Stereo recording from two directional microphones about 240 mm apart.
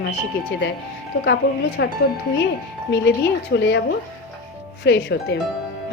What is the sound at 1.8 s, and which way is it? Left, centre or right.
Speech, left.